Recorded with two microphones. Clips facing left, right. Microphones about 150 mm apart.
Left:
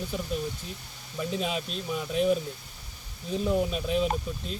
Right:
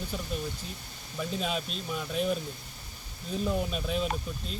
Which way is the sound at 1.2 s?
5° left (ahead or behind).